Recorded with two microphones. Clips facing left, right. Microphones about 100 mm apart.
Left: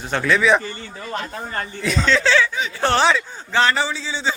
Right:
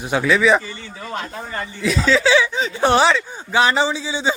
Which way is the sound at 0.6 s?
50° left (ahead or behind).